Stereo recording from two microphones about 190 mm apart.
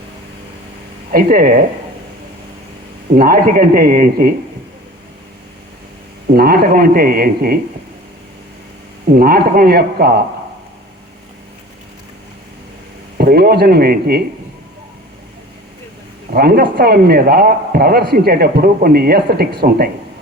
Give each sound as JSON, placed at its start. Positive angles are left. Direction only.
{"t": 1.1, "sound": "a man's voice", "side_deg": -50}
{"t": 3.2, "sound": "a man's voice", "side_deg": -45}
{"t": 6.3, "sound": "a man's voice", "side_deg": -50}
{"t": 9.1, "sound": "a man's voice", "side_deg": -50}
{"t": 13.1, "sound": "speech", "side_deg": -55}
{"t": 16.3, "sound": "a man's voice", "side_deg": -55}